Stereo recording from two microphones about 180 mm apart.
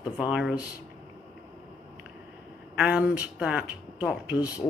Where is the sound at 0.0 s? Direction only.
5° right (ahead or behind).